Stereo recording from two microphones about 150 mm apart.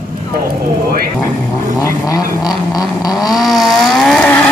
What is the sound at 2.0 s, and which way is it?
Vehicle, 25° left (ahead or behind).